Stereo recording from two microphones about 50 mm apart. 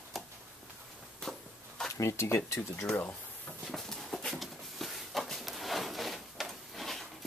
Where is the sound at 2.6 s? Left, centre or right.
Centre.